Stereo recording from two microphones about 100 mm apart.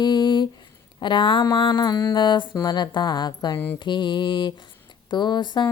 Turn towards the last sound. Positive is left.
turn(degrees=50)  # may be behind; listen again after turning